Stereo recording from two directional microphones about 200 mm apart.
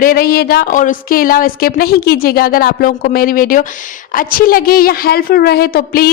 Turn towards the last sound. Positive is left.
turn(degrees=50)  # may be behind; listen again after turning